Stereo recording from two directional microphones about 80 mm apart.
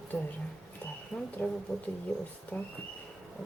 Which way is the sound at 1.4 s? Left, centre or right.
Centre.